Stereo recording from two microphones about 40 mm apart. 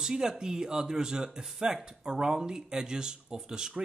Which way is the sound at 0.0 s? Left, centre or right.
Centre.